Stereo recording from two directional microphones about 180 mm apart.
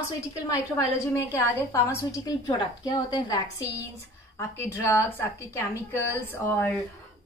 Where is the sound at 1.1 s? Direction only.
15° left (ahead or behind).